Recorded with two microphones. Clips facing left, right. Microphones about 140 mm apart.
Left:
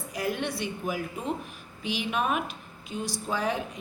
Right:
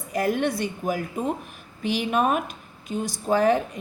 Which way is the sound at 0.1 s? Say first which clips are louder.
Right 7 dB; 50° right (ahead or behind).